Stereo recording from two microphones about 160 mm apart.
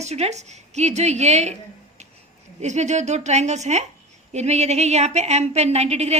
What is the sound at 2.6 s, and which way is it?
A woman's voice, 45° right (ahead or behind).